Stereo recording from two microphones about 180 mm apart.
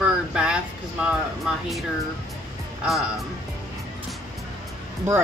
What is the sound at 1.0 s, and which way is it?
Speech, centre (ahead or behind).